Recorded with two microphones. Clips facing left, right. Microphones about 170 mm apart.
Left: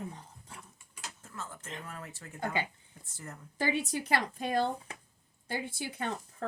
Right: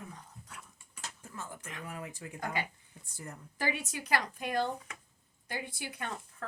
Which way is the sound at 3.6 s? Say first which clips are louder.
Left 4 dB; 30° left (ahead or behind).